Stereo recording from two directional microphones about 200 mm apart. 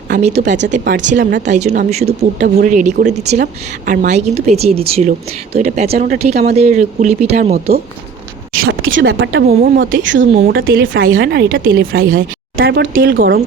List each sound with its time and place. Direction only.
0.1 s speech: 35° right (ahead or behind)
2.4 s speech: 45° right (ahead or behind)
8.9 s a woman's voice: 70° right (ahead or behind); by 11.8 s 50° right (ahead or behind)
11.8 s speech: 75° right (ahead or behind)
12.5 s speech: 50° right (ahead or behind)